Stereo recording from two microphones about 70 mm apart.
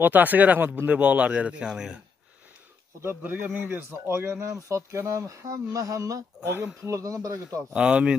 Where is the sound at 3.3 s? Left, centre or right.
Right.